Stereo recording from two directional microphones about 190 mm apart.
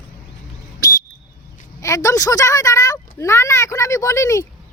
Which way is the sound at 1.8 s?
15° left (ahead or behind).